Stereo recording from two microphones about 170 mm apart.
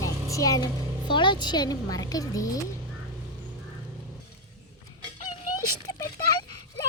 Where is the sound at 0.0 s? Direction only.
20° left (ahead or behind).